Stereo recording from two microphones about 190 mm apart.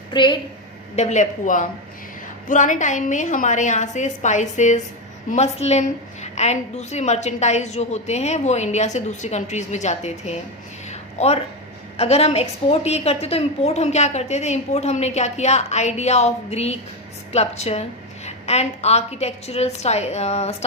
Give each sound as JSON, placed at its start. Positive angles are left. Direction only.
{"t": 0.1, "sound": "a woman's voice", "side_deg": 25}
{"t": 0.9, "sound": "a woman's voice", "side_deg": 35}
{"t": 10.8, "sound": "a sound", "side_deg": 35}
{"t": 11.9, "sound": "a woman's voice", "side_deg": 35}